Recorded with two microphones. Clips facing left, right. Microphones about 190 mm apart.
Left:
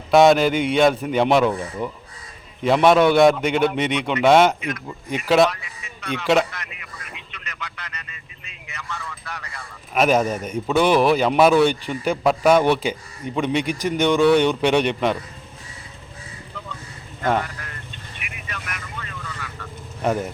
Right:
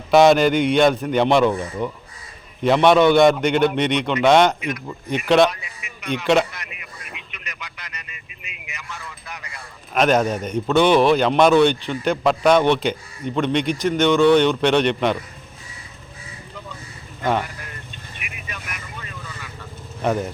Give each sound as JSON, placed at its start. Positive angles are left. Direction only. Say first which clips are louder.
{"t": 0.1, "sound": "a man's voice", "louder": "right 1 dB", "side_deg": 0}
{"t": 4.6, "sound": "speech", "louder": "right 1 dB", "side_deg": -10}
{"t": 5.0, "sound": "a man's voice", "louder": "right 1 dB", "side_deg": 5}
{"t": 5.5, "sound": "speech", "louder": "left 1 dB", "side_deg": -20}
{"t": 7.0, "sound": "vehicle", "louder": "right 1 dB", "side_deg": -15}
{"t": 8.7, "sound": "speech", "louder": "left 3 dB", "side_deg": -10}
{"t": 9.9, "sound": "a man's voice", "louder": "right 1 dB", "side_deg": 5}
{"t": 17.4, "sound": "speech", "louder": "even", "side_deg": -15}
{"t": 18.4, "sound": "vehicle", "louder": "left 2 dB", "side_deg": -15}